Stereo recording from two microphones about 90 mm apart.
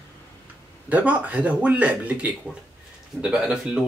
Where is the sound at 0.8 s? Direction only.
15° right (ahead or behind).